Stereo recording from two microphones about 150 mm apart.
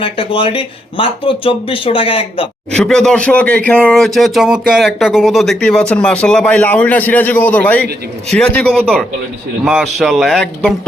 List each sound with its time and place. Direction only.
0.0 s speech: 35° left (ahead or behind)
2.7 s speech: 5° left (ahead or behind)